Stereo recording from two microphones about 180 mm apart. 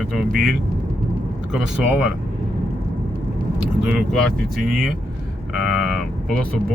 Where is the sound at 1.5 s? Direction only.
5° right (ahead or behind).